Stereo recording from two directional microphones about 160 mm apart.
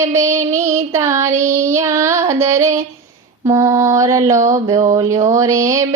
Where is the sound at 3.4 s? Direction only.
20° right (ahead or behind).